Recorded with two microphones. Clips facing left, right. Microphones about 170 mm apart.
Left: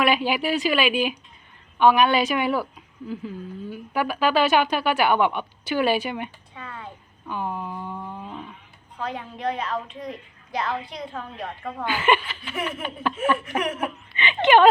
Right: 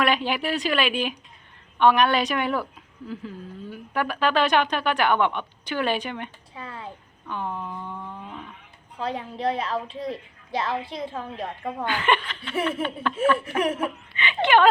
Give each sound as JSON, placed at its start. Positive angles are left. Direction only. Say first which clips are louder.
{"t": 0.0, "sound": "a woman's voice", "louder": "left 2 dB", "side_deg": 5}
{"t": 6.6, "sound": "a sound", "louder": "right 1 dB", "side_deg": -30}
{"t": 7.3, "sound": "a sound", "louder": "left 2 dB", "side_deg": 5}
{"t": 9.0, "sound": "a woman's voice", "louder": "right 2 dB", "side_deg": -30}
{"t": 11.9, "sound": "a woman's voice", "louder": "left 3 dB", "side_deg": 5}
{"t": 13.6, "sound": "a woman's voice", "louder": "right 3 dB", "side_deg": -30}
{"t": 13.8, "sound": "laughter", "louder": "even", "side_deg": 20}
{"t": 14.4, "sound": "a woman's voice", "louder": "left 3 dB", "side_deg": 15}